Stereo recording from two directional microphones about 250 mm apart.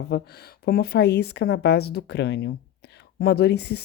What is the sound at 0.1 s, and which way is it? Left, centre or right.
Speech, left.